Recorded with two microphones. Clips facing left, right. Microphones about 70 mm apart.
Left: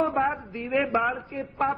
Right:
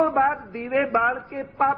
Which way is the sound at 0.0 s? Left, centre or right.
Right.